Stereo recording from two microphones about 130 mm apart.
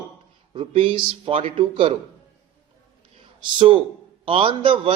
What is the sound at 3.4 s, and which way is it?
Speech, 40° right (ahead or behind).